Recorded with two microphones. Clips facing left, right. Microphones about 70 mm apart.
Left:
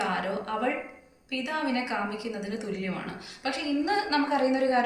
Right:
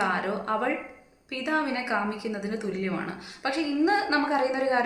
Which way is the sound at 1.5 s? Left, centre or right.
Right.